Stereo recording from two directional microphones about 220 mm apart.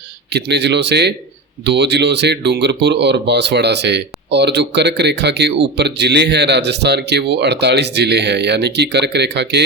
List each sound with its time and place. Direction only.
0.3 s speech: 50° right (ahead or behind)